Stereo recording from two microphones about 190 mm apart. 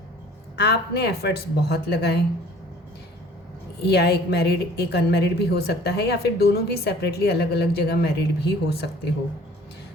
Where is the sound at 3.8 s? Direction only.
60° left (ahead or behind).